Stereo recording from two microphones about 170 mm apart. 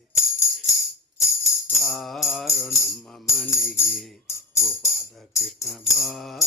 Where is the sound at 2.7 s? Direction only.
15° left (ahead or behind).